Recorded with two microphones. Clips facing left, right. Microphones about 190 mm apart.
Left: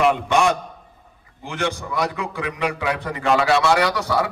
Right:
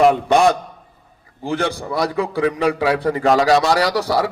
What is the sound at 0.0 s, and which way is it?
A man's voice, 35° right (ahead or behind).